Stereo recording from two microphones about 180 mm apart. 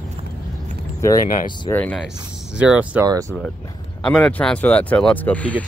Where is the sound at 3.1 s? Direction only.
20° right (ahead or behind).